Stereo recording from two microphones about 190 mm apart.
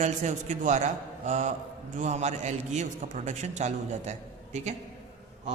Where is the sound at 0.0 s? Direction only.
40° right (ahead or behind).